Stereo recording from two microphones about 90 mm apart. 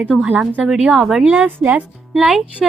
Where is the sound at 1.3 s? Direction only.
15° right (ahead or behind).